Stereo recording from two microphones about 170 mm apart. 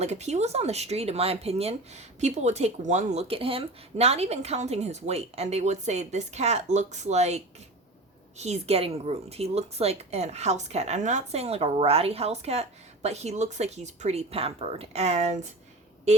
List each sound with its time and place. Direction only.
0.0 s speech: 40° right (ahead or behind)